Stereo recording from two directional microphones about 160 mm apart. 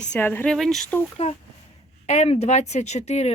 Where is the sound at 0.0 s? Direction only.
10° left (ahead or behind).